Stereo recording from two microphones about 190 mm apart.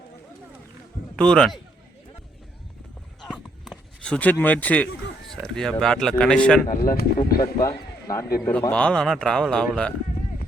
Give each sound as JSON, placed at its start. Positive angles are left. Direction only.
{"t": 1.1, "sound": "a man's voice", "side_deg": 5}
{"t": 3.2, "sound": "a sound", "side_deg": 0}
{"t": 5.8, "sound": "a man's voice", "side_deg": 5}
{"t": 6.7, "sound": "speech", "side_deg": 50}
{"t": 7.6, "sound": "a man's voice", "side_deg": 15}